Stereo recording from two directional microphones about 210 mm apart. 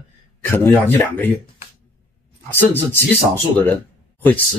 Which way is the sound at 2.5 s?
10° left (ahead or behind).